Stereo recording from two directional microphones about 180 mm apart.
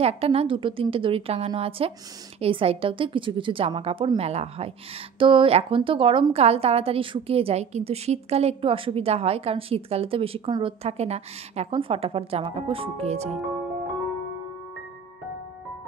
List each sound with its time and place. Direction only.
0.0 s a woman's voice: 35° right (ahead or behind)